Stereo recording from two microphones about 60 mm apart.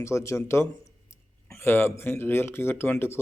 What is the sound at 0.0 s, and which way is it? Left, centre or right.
A man's voice, left.